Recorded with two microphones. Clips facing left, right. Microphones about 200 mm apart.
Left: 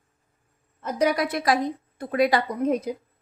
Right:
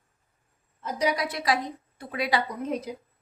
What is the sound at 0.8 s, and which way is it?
A woman's voice, 55° left (ahead or behind).